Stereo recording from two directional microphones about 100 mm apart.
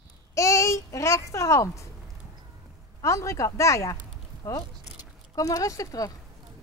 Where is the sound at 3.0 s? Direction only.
30° left (ahead or behind).